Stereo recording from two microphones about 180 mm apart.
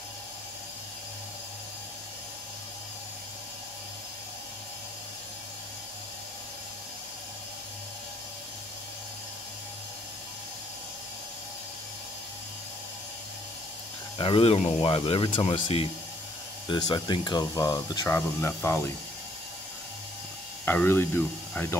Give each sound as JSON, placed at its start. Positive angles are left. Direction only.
{"t": 14.1, "sound": "speech", "side_deg": 30}
{"t": 20.6, "sound": "speech", "side_deg": 10}